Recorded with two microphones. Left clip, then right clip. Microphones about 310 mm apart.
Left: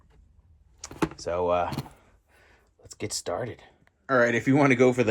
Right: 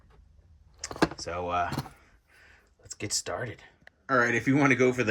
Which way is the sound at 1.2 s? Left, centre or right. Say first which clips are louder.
Left 4 dB; centre.